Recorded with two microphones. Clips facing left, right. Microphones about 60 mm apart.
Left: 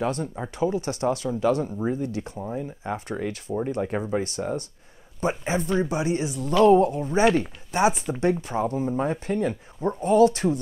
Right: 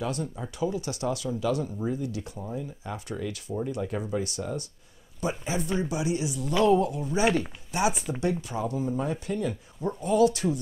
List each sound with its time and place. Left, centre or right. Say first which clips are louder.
0.0 s speech: left 4 dB; left